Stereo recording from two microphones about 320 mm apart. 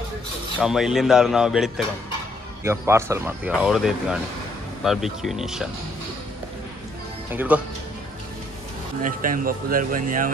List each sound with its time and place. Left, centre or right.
0.6 s speech: centre
7.2 s speech: centre
9.0 s speech: right